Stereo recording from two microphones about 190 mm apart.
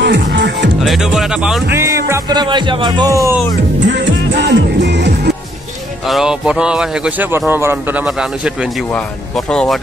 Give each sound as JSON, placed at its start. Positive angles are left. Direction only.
{"t": 0.0, "sound": "speech", "side_deg": -65}
{"t": 0.8, "sound": "speech", "side_deg": 0}
{"t": 3.8, "sound": "music", "side_deg": -65}
{"t": 6.0, "sound": "a man's voice", "side_deg": 0}
{"t": 9.5, "sound": "a man's voice", "side_deg": 5}